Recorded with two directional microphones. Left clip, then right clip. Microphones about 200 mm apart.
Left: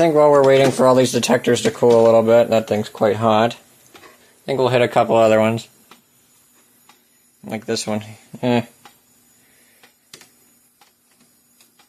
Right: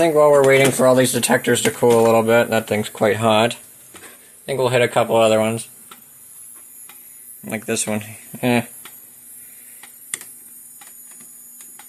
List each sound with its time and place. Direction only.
0.0 s speech: 20° left (ahead or behind)
4.5 s speech: 30° left (ahead or behind)
7.4 s speech: 15° left (ahead or behind)